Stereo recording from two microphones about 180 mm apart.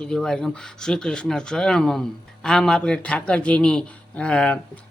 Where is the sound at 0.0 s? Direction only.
5° left (ahead or behind).